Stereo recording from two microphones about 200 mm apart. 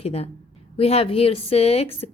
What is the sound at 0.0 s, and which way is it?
A woman's voice, 30° left (ahead or behind).